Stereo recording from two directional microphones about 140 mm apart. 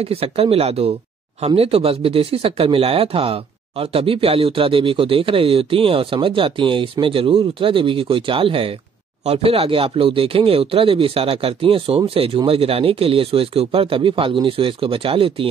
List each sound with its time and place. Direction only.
0.0 s speech: 45° right (ahead or behind)